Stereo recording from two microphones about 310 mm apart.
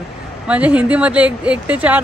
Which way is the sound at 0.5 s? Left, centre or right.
Centre.